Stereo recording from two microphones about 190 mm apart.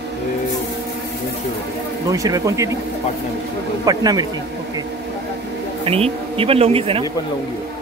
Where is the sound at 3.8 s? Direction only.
20° right (ahead or behind).